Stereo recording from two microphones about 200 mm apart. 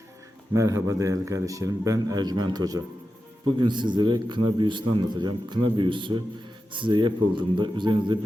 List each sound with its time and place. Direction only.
0.5 s a man's voice: 15° right (ahead or behind)